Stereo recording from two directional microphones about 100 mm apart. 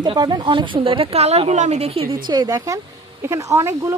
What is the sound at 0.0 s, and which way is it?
A woman's voice, 50° right (ahead or behind).